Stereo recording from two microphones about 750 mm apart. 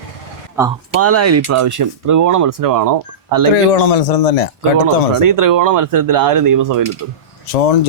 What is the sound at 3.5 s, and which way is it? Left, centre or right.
Speech, left.